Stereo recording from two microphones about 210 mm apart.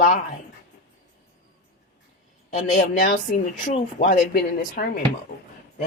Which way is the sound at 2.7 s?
45° left (ahead or behind).